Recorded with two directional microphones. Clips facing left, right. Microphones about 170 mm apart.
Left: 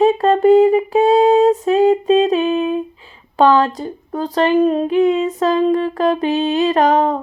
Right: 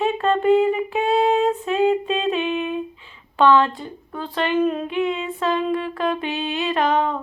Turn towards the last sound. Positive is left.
turn(degrees=40)  # may be behind; listen again after turning